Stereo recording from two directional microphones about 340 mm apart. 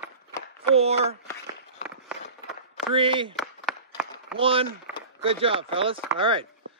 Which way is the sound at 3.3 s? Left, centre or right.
Centre.